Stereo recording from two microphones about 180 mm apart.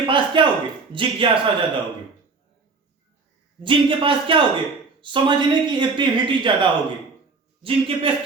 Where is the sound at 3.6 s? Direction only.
30° right (ahead or behind).